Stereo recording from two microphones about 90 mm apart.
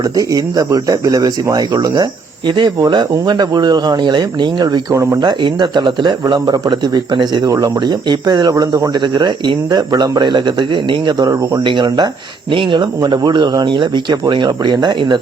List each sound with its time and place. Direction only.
0.0 s speech: 45° right (ahead or behind)
2.5 s speech: 60° right (ahead or behind); by 5.2 s 40° right (ahead or behind)
5.2 s speech: 55° right (ahead or behind)
7.4 s speech: 45° right (ahead or behind)